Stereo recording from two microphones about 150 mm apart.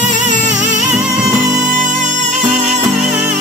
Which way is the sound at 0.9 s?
5° right (ahead or behind).